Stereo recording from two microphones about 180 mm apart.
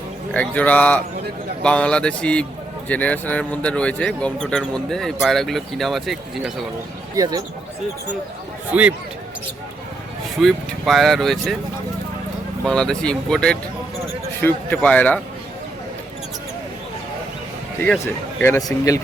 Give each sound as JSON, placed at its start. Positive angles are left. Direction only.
{"t": 0.3, "sound": "speech", "side_deg": 10}
{"t": 7.2, "sound": "speech", "side_deg": -20}
{"t": 8.7, "sound": "speech", "side_deg": -5}
{"t": 10.4, "sound": "speech", "side_deg": 0}
{"t": 12.6, "sound": "speech", "side_deg": 5}
{"t": 18.0, "sound": "speech", "side_deg": 10}